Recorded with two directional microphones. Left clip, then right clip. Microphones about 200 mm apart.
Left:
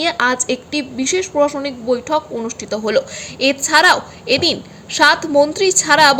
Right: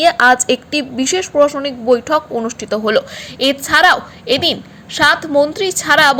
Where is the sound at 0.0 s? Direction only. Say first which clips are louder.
Right 6 dB; 15° right (ahead or behind).